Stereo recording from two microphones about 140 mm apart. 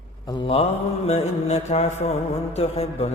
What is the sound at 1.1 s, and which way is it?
A man's voice, 50° left (ahead or behind).